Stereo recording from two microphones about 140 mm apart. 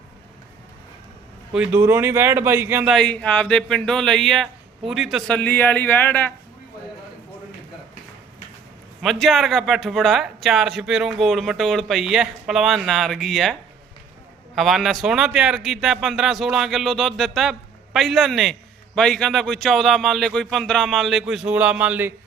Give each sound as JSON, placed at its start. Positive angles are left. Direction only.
{"t": 1.5, "sound": "speech", "side_deg": -5}
{"t": 1.8, "sound": "speech", "side_deg": -20}
{"t": 2.8, "sound": "a man's voice", "side_deg": 5}
{"t": 5.4, "sound": "speech", "side_deg": 10}
{"t": 9.0, "sound": "a man's voice", "side_deg": 0}